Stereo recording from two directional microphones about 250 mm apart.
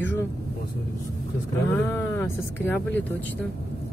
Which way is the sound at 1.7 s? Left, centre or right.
Centre.